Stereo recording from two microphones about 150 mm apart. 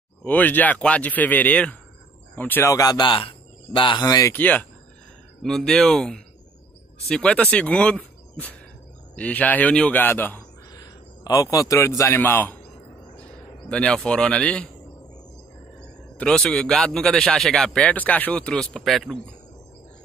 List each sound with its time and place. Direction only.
0.2 s speech: 10° left (ahead or behind); by 4.3 s 25° left (ahead or behind)
4.3 s a man's voice: 10° left (ahead or behind)
10.7 s a man's voice: 25° left (ahead or behind)
13.7 s speech: 5° left (ahead or behind)
16.2 s a man's voice: 5° left (ahead or behind)